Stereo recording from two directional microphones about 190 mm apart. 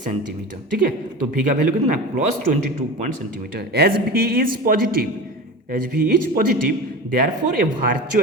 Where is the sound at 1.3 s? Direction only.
45° right (ahead or behind).